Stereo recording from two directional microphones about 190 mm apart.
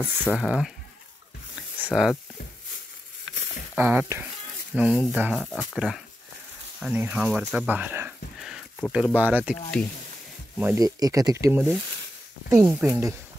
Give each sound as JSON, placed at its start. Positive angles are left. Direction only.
{"t": 0.0, "sound": "speech", "side_deg": -10}
{"t": 1.8, "sound": "speech", "side_deg": -5}
{"t": 3.7, "sound": "speech", "side_deg": -10}
{"t": 5.3, "sound": "speech", "side_deg": 5}
{"t": 10.6, "sound": "speech", "side_deg": -15}